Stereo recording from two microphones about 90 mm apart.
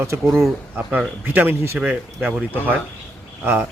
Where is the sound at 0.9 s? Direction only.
20° right (ahead or behind).